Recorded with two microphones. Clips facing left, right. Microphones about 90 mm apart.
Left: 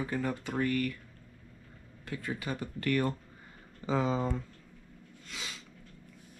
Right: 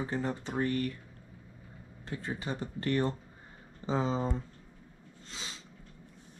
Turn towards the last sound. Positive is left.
turn(degrees=-25)  # may be behind; listen again after turning